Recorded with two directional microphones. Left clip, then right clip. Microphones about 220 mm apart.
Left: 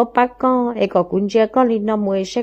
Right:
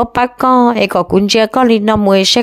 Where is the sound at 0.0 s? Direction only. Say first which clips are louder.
Right 3 dB; 40° right (ahead or behind).